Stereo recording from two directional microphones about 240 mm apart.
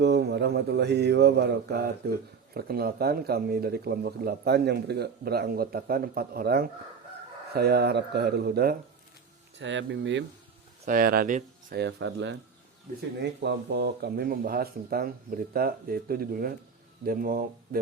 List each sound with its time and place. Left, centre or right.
0.0 s mantra: right
2.6 s speech: right
9.6 s mantra: right
10.8 s speech: right